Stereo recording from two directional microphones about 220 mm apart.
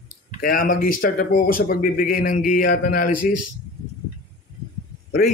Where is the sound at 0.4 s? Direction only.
40° left (ahead or behind).